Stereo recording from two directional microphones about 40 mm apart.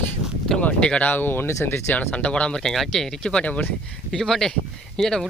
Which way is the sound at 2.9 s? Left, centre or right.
Centre.